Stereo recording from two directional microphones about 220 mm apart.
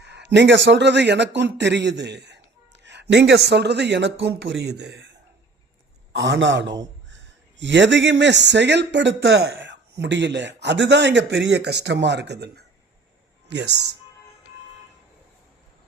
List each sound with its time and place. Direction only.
0.0 s a man's voice: 50° right (ahead or behind)
6.1 s a man's voice: 55° right (ahead or behind)